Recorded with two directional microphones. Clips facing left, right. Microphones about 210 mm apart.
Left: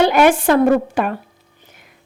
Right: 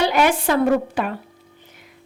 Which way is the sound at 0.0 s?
55° left (ahead or behind).